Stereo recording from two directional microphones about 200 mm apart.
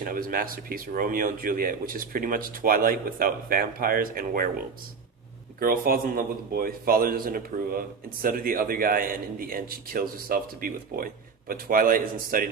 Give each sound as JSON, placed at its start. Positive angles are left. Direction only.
{"t": 0.0, "sound": "a man's voice", "side_deg": -45}